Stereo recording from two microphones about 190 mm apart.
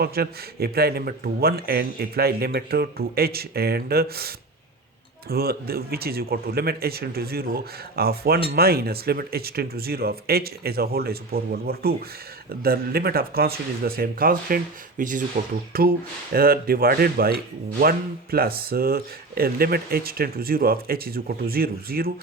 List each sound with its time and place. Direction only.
0.0 s a man's voice: 55° right (ahead or behind)